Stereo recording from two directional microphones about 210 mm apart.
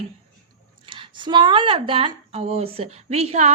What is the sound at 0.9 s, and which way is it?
A woman's voice, 25° right (ahead or behind).